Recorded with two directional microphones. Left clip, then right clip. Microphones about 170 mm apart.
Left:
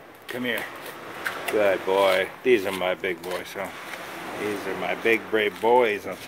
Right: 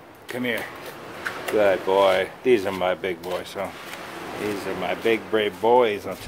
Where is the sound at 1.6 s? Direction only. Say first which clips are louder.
Right 2 dB; centre (ahead or behind).